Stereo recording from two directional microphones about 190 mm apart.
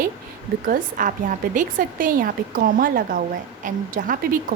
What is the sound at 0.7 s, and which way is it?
A woman's voice, 45° right (ahead or behind).